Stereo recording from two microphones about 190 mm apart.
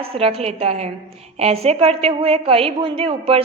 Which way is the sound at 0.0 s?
30° right (ahead or behind).